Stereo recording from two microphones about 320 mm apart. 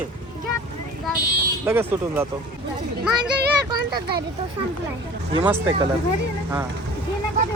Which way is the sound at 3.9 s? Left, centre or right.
Right.